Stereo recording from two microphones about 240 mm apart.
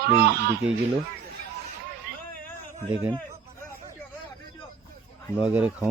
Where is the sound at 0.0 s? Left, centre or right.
Right.